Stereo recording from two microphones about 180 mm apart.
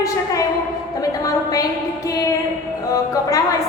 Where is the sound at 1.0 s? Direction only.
20° left (ahead or behind).